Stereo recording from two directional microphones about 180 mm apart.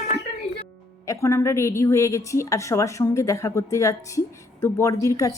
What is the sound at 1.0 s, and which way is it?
A woman's voice, 15° left (ahead or behind).